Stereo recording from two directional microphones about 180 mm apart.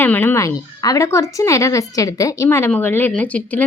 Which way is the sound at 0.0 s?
10° left (ahead or behind).